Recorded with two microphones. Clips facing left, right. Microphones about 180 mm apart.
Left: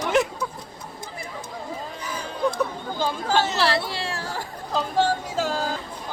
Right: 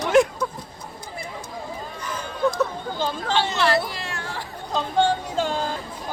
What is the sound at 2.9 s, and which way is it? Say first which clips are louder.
Speech: left 2 dB; 10° left (ahead or behind).